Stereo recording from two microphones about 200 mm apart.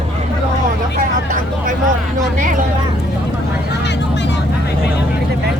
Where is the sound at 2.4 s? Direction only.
40° right (ahead or behind).